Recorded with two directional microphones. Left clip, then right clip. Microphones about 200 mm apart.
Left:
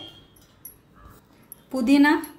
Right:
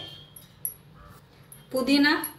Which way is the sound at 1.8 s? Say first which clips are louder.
Left 3 dB; 50° left (ahead or behind).